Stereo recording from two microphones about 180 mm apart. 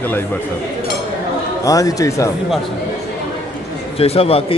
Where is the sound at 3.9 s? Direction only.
30° left (ahead or behind).